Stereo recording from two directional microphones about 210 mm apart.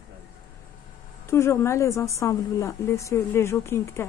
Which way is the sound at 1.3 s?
10° left (ahead or behind).